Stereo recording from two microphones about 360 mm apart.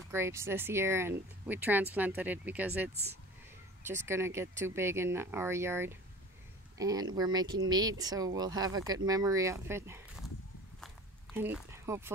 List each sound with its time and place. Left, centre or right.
0.1 s speech: centre
2.9 s speech: centre
3.8 s speech: centre
11.3 s speech: centre